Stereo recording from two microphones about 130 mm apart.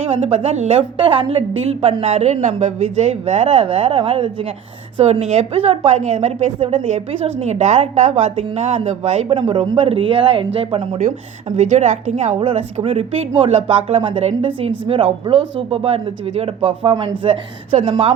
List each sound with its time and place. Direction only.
0.5 s a woman's voice: 60° right (ahead or behind)
0.8 s a woman's voice: 40° right (ahead or behind)
6.0 s a woman's voice: 65° right (ahead or behind)
9.3 s a woman's voice: 40° right (ahead or behind); by 12.4 s 60° right (ahead or behind)
12.4 s a woman's voice: 40° right (ahead or behind)